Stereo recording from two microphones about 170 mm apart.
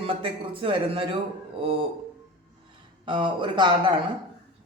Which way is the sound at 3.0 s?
30° right (ahead or behind).